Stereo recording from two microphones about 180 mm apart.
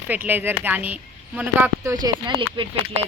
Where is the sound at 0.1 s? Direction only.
10° right (ahead or behind); by 2.6 s 25° right (ahead or behind).